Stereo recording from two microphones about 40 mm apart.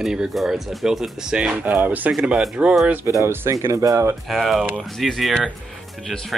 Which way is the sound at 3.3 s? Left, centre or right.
Right.